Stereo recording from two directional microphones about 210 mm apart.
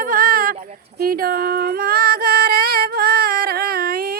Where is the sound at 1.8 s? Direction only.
45° right (ahead or behind).